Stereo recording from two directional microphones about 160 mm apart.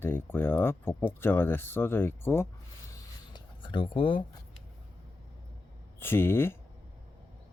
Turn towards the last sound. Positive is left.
turn(degrees=15)  # may be behind; listen again after turning